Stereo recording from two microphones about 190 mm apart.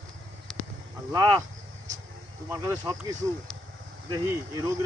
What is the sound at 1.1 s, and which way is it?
Speech, 20° right (ahead or behind).